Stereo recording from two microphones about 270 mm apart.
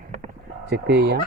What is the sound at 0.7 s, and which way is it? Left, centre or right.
Speech, right.